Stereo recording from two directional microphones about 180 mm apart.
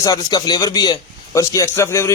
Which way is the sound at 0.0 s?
20° left (ahead or behind).